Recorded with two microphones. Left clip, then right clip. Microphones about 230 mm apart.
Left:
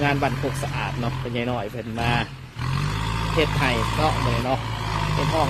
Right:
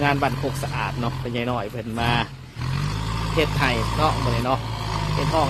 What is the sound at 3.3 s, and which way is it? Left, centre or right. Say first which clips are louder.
Speech: right 1 dB; centre.